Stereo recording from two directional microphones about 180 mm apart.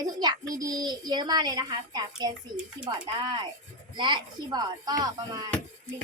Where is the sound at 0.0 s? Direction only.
20° right (ahead or behind).